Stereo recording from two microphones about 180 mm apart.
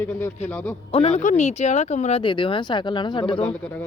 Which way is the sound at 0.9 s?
35° left (ahead or behind).